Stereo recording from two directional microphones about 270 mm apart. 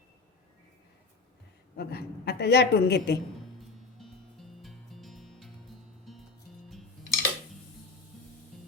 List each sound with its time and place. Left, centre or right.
1.7 s a woman's voice: left
3.9 s music: centre